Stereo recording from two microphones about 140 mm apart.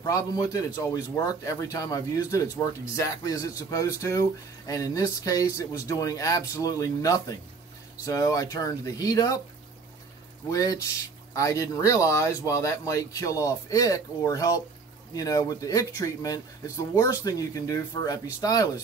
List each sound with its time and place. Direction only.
0.0 s speech: 25° left (ahead or behind)
10.5 s speech: 25° left (ahead or behind)